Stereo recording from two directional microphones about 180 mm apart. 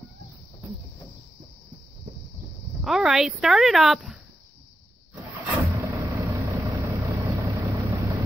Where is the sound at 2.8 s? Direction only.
Centre (ahead or behind).